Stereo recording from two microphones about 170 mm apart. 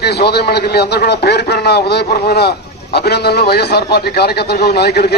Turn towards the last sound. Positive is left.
turn(degrees=70)  # may be behind; listen again after turning